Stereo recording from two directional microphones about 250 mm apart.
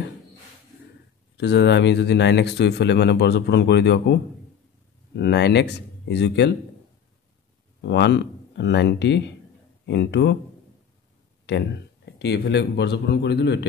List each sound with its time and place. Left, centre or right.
1.3 s speech: left
7.8 s speech: left
11.4 s speech: left